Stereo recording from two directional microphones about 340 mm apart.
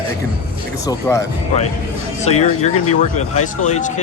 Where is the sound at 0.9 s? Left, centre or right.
Centre.